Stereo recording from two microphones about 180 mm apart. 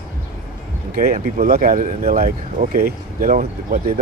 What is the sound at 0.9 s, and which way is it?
Speech, 50° right (ahead or behind).